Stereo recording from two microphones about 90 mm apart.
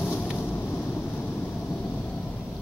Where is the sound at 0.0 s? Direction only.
25° left (ahead or behind).